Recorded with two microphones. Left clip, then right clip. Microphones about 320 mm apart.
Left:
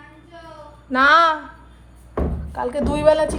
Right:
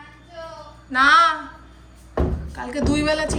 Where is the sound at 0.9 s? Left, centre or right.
Centre.